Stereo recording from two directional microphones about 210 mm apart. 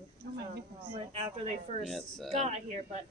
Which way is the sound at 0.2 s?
50° right (ahead or behind).